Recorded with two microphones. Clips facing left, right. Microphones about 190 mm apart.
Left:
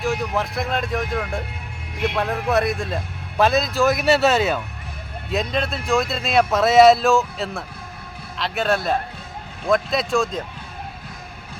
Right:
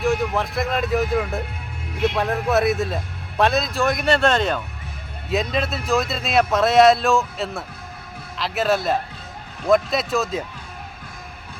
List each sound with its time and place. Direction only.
0.0 s a man's voice: centre (ahead or behind)